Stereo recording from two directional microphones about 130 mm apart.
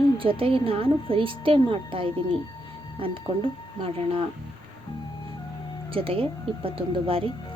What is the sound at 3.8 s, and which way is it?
Speech, 45° right (ahead or behind).